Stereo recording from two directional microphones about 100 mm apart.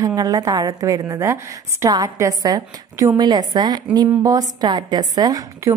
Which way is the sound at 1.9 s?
40° right (ahead or behind).